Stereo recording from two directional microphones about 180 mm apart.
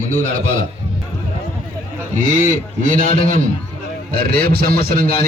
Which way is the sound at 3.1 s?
35° left (ahead or behind).